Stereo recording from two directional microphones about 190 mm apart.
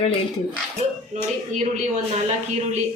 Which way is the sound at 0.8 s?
35° right (ahead or behind).